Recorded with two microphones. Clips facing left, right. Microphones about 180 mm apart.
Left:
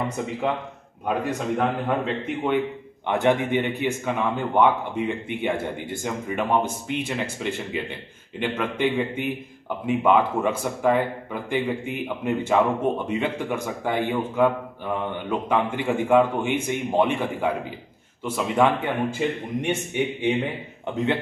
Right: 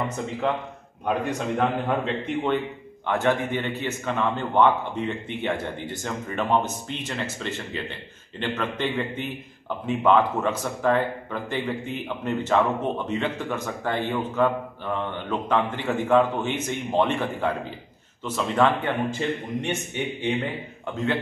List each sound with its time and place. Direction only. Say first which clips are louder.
1.0 s a man's voice: even; 5° left (ahead or behind)
3.1 s a man's voice: left 2 dB; 20° left (ahead or behind)